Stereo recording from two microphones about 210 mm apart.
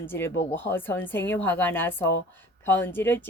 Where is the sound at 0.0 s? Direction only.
10° left (ahead or behind).